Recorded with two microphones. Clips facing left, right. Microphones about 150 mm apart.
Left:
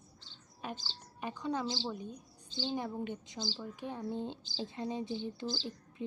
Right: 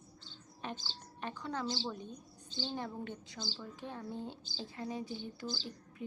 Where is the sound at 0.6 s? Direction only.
10° left (ahead or behind).